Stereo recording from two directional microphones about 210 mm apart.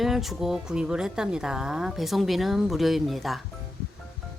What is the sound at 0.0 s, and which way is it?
A woman's voice, centre (ahead or behind).